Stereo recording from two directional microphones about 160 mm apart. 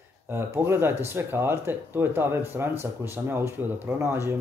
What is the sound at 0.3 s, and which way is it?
Speech, 15° right (ahead or behind).